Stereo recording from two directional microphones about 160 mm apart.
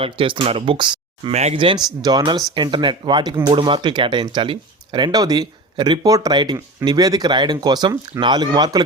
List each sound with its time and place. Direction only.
0.0 s speech: 30° right (ahead or behind)
1.3 s speech: 45° right (ahead or behind); by 8.8 s 25° right (ahead or behind)